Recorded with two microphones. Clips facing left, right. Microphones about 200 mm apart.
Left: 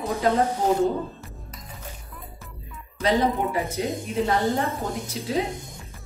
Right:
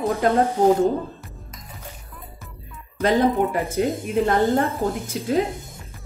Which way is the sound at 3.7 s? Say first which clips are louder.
Right 5 dB; 50° right (ahead or behind).